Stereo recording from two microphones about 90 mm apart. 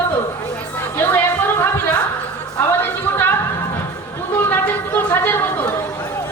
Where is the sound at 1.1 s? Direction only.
20° left (ahead or behind).